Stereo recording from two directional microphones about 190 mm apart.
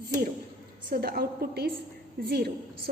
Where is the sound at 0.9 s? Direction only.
55° right (ahead or behind).